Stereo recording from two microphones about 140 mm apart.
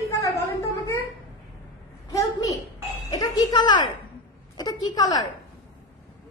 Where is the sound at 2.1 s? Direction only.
25° left (ahead or behind).